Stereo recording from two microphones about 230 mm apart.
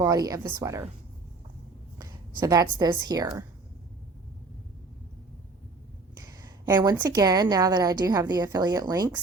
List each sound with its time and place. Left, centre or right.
0.0 s a woman's voice: centre
2.0 s a woman's voice: centre
6.1 s a woman's voice: centre